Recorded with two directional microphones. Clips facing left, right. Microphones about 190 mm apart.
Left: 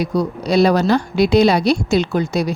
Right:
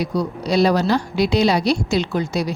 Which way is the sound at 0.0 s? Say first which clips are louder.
Left 3 dB; 50° left (ahead or behind).